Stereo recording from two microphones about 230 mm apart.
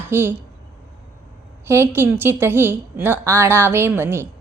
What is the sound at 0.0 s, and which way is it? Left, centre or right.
Speech, centre.